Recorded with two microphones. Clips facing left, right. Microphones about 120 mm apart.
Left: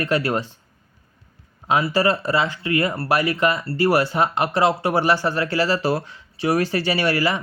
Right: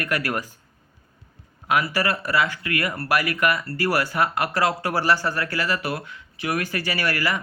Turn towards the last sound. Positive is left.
turn(degrees=25)  # may be behind; listen again after turning